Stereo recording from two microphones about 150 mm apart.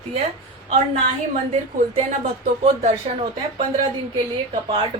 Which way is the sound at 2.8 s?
40° right (ahead or behind).